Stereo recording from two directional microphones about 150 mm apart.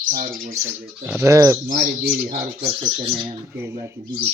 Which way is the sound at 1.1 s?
20° right (ahead or behind).